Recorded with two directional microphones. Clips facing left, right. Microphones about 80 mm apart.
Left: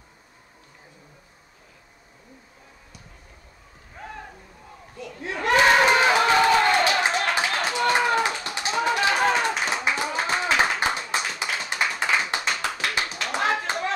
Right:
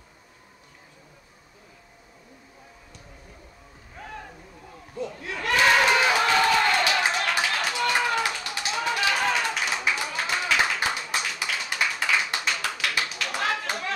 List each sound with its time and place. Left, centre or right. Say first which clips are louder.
5.2 s crowd: left 4 dB; left